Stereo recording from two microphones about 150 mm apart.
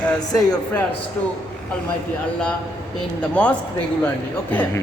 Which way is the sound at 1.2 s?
15° left (ahead or behind).